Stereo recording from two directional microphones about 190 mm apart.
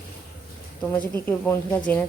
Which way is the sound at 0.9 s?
10° left (ahead or behind).